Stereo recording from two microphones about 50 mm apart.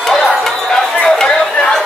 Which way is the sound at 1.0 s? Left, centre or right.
Centre.